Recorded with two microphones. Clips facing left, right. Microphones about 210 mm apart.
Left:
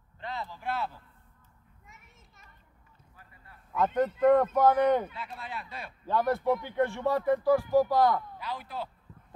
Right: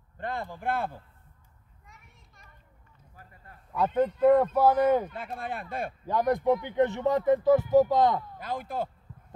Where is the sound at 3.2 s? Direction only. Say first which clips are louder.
Right 4 dB; 45° right (ahead or behind).